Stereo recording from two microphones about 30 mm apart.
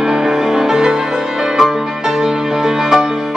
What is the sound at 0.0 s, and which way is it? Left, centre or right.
Music, centre.